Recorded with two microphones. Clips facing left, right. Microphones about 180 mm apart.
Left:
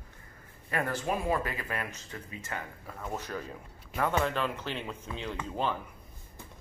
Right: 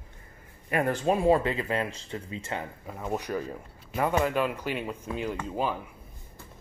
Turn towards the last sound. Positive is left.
turn(degrees=-10)  # may be behind; listen again after turning